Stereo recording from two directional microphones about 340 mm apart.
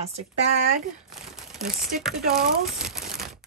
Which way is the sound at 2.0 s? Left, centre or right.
Centre.